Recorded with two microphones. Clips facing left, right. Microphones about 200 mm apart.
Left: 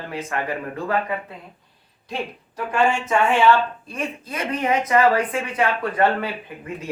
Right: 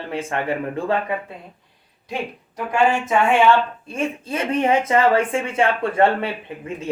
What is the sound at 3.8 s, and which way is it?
Speech, 25° right (ahead or behind).